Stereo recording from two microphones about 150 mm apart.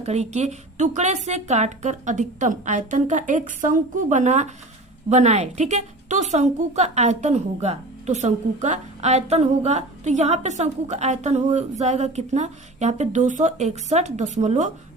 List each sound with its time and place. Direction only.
0.0 s a woman's voice: 45° right (ahead or behind)